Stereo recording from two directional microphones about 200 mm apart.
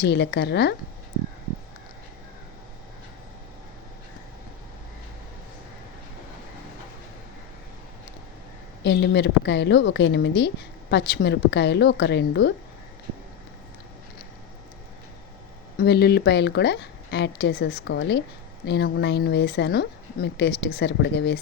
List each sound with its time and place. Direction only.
0.0 s a woman's voice: 55° left (ahead or behind)
8.8 s a woman's voice: 60° left (ahead or behind)
15.8 s a woman's voice: 55° left (ahead or behind)